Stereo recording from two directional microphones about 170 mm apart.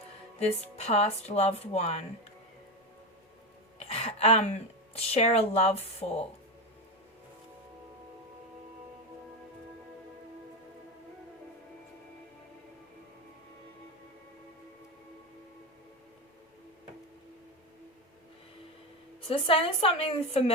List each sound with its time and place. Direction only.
0.3 s speech: 40° left (ahead or behind)
3.8 s a woman's voice: 40° left (ahead or behind)
19.3 s speech: 35° left (ahead or behind)